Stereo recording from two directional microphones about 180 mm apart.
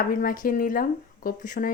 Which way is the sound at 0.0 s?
50° left (ahead or behind).